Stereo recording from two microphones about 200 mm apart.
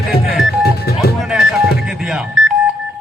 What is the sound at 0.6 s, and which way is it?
Music, 50° left (ahead or behind).